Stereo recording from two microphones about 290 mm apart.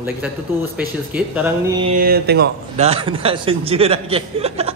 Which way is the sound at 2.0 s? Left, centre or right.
Right.